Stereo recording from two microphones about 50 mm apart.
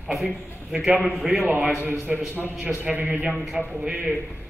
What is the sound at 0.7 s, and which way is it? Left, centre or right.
A man's voice, centre.